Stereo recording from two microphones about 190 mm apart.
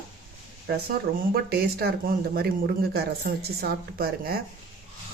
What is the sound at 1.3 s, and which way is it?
Speech, 55° right (ahead or behind).